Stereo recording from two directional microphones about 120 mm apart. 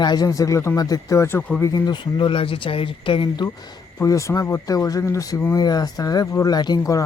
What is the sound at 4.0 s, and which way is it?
Speech, 25° left (ahead or behind).